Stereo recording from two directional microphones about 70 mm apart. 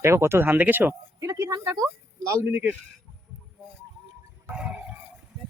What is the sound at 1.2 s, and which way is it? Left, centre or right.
Speech, right.